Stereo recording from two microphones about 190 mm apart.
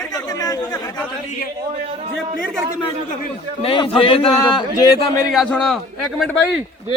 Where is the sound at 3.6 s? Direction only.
30° left (ahead or behind).